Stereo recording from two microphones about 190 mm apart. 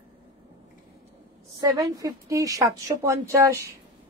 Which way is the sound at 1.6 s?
20° right (ahead or behind).